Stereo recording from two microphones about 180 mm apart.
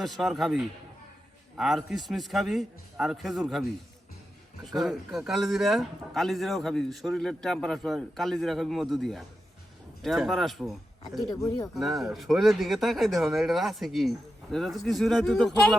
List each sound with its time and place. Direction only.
0.0 s speech: centre (ahead or behind)
4.7 s speech: centre (ahead or behind)
11.3 s speech: 20° left (ahead or behind)
11.7 s speech: centre (ahead or behind)